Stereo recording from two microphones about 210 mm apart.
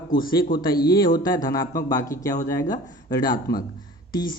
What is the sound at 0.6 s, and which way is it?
Speech, 20° left (ahead or behind).